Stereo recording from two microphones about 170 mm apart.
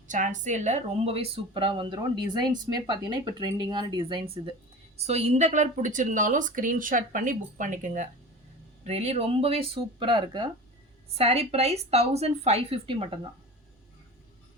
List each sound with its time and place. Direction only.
0.1 s speech: 45° right (ahead or behind); by 4.5 s 30° right (ahead or behind)
4.9 s a woman's voice: 40° right (ahead or behind)